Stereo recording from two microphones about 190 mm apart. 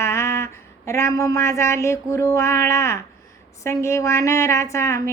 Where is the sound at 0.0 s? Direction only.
15° left (ahead or behind).